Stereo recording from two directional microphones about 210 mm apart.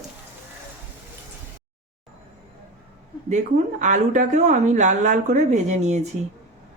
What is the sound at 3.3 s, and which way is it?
Speech, 35° right (ahead or behind).